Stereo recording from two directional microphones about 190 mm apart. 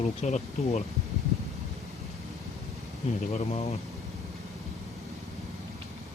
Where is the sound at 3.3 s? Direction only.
35° left (ahead or behind).